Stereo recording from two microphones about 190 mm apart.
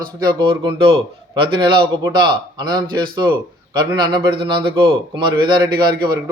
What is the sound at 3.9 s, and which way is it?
A man's voice, 25° right (ahead or behind).